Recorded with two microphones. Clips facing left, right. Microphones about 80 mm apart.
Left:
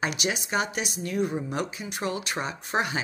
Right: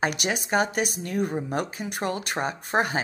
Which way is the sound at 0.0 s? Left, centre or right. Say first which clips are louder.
Right 2 dB; right.